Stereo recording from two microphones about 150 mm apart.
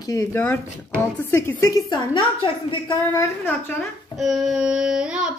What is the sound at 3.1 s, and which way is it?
Speech, 15° left (ahead or behind).